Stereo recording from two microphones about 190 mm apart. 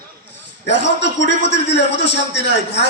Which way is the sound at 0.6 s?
65° left (ahead or behind).